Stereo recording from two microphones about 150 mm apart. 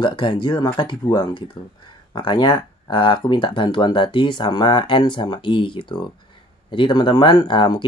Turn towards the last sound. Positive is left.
turn(degrees=30)  # may be behind; listen again after turning